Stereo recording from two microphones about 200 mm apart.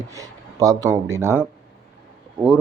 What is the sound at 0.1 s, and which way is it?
Speech, 15° right (ahead or behind).